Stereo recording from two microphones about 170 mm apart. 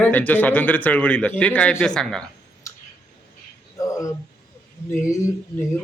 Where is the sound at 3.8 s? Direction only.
20° left (ahead or behind).